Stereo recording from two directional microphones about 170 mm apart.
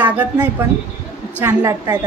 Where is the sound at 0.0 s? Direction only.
10° right (ahead or behind).